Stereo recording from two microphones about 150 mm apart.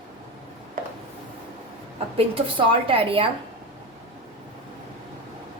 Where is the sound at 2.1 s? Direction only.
35° right (ahead or behind).